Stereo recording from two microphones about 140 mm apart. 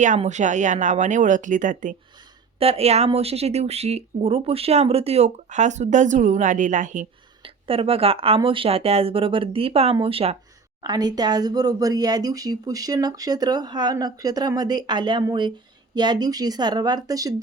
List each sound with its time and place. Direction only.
0.3 s speech: 60° right (ahead or behind)
2.6 s speech: 45° right (ahead or behind); by 7.1 s 65° right (ahead or behind)
7.4 s speech: 40° right (ahead or behind)
10.8 s speech: 30° right (ahead or behind)